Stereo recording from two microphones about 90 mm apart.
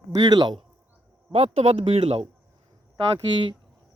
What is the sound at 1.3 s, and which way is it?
Speech, 90° right.